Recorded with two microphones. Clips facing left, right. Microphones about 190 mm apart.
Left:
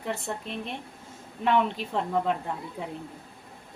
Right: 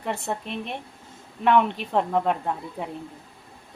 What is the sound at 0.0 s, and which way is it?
A woman's voice, 60° right (ahead or behind).